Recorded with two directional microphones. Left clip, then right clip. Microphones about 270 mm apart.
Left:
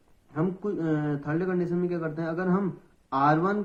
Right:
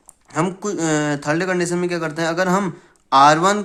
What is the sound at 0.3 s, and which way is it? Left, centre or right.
Speech, right.